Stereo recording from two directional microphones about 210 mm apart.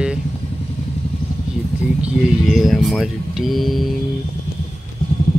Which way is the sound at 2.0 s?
Centre (ahead or behind).